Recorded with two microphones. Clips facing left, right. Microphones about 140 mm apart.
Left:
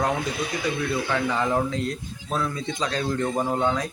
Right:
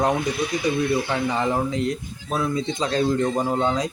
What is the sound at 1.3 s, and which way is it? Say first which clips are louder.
Speech: right 1 dB; 20° right (ahead or behind).